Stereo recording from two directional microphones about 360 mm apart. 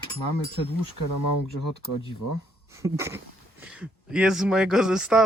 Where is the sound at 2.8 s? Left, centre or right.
Centre.